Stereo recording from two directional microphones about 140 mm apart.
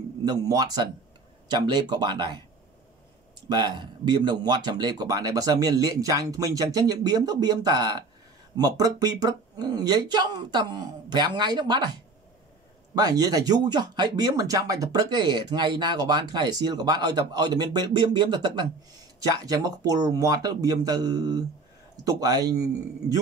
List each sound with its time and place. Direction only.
0.2 s speech: 25° right (ahead or behind)
3.4 s speech: 35° right (ahead or behind)